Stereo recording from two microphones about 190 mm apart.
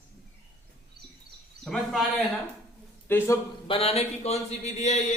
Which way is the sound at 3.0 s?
15° left (ahead or behind).